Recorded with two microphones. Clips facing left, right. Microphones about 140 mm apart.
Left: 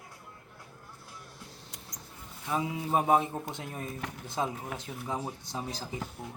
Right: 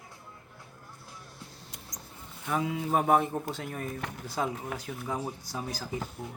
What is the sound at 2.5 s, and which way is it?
Speech, 20° left (ahead or behind).